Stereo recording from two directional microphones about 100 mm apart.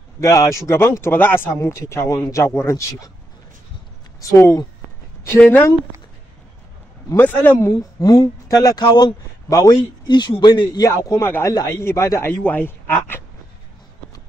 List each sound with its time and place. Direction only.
0.2 s speech: 30° left (ahead or behind)
4.2 s speech: 30° left (ahead or behind)
7.2 s speech: 20° left (ahead or behind)
8.0 s a man's voice: 35° left (ahead or behind)
10.9 s speech: 25° left (ahead or behind)